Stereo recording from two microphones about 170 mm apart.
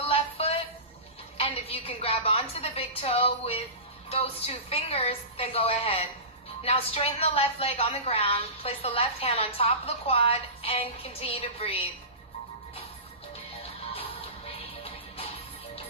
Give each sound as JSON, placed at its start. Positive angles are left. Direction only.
{"t": 0.0, "sound": "music", "side_deg": 35}
{"t": 1.4, "sound": "a sound", "side_deg": 35}
{"t": 4.1, "sound": "a woman's voice", "side_deg": 35}
{"t": 13.6, "sound": "music", "side_deg": 35}